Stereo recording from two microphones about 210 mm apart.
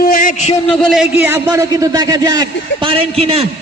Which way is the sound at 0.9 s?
5° right (ahead or behind).